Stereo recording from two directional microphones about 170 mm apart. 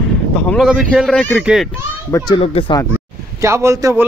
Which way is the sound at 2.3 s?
30° left (ahead or behind).